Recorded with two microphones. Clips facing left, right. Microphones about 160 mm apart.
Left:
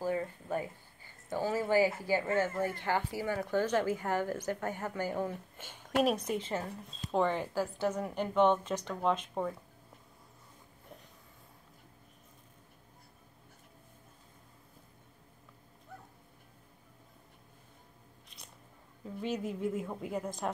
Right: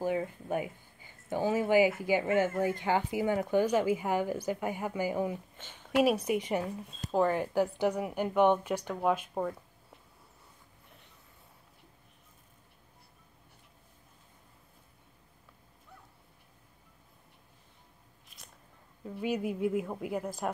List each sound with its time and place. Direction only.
0.0 s a sound: 15° right (ahead or behind)
2.0 s speech: 15° right (ahead or behind)
5.6 s a woman's voice: 10° left (ahead or behind)
6.0 s speech: 10° right (ahead or behind)
7.0 s speech: centre (ahead or behind)
7.5 s speech: 15° right (ahead or behind)
18.3 s biting: 5° right (ahead or behind)
19.0 s speech: 10° right (ahead or behind)